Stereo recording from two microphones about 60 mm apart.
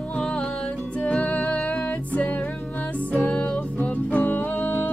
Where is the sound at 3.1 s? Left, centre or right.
Left.